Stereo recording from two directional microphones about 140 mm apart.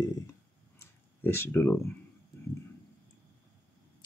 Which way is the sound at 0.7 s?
20° left (ahead or behind).